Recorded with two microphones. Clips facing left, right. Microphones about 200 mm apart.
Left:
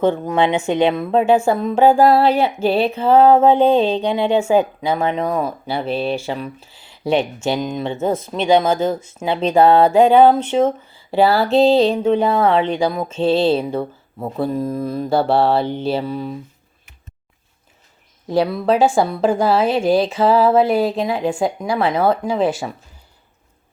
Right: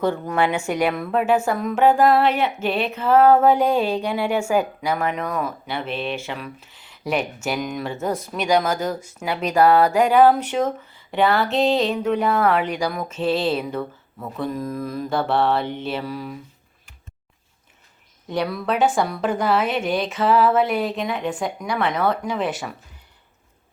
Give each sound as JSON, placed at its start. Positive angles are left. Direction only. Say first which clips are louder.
{"t": 0.0, "sound": "speech", "louder": "left 4 dB", "side_deg": 20}
{"t": 18.3, "sound": "speech", "louder": "left 7 dB", "side_deg": 30}